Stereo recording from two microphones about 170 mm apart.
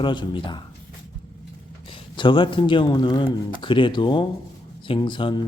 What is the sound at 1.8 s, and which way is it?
Speech, 30° left (ahead or behind).